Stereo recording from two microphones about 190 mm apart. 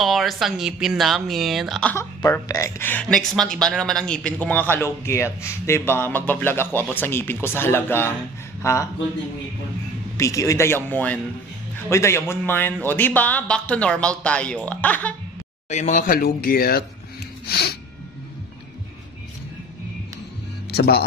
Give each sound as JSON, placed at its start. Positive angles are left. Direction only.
{"t": 0.0, "sound": "speech", "side_deg": 0}
{"t": 10.1, "sound": "speech", "side_deg": 15}
{"t": 15.7, "sound": "speech", "side_deg": 40}
{"t": 17.5, "sound": "music", "side_deg": 55}
{"t": 20.7, "sound": "music", "side_deg": 55}